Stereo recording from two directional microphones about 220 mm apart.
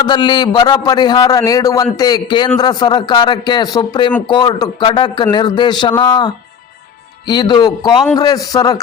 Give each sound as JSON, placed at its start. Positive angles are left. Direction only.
{"t": 0.0, "sound": "a man's voice", "side_deg": 20}